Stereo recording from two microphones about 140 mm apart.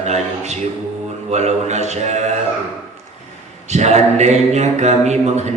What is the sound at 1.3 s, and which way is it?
Mantra, 55° right (ahead or behind).